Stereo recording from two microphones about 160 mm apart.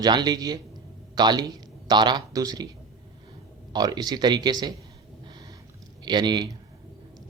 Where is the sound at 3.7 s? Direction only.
25° right (ahead or behind).